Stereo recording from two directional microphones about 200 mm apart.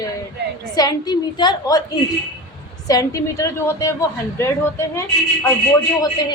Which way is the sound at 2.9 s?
15° left (ahead or behind).